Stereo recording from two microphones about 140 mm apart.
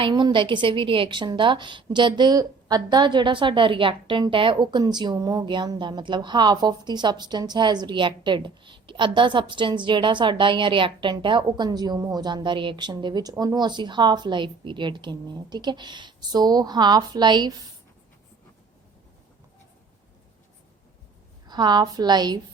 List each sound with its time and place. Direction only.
0.0 s a woman's voice: 35° right (ahead or behind)
21.4 s a woman's voice: 30° right (ahead or behind)